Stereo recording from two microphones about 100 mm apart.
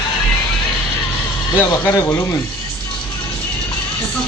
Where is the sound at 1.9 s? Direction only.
25° left (ahead or behind).